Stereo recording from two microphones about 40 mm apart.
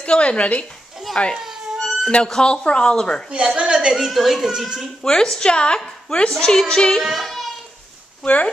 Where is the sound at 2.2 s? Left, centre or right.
Centre.